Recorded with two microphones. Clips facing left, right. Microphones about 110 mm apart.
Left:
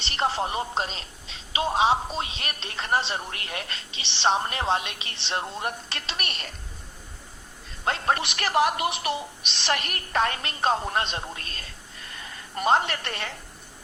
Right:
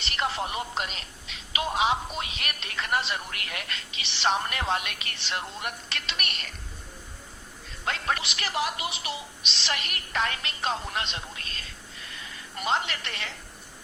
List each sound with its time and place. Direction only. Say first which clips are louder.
0.0 s speech: left 3 dB; 30° left (ahead or behind)
7.9 s speech: left 4 dB; 35° left (ahead or behind)
8.2 s a woman's voice: left 7 dB; 50° left (ahead or behind)